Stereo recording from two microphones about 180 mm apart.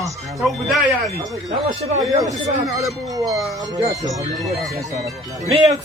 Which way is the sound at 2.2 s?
20° right (ahead or behind).